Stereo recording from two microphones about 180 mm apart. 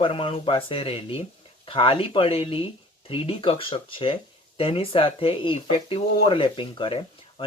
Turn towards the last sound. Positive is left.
turn(degrees=25)  # may be behind; listen again after turning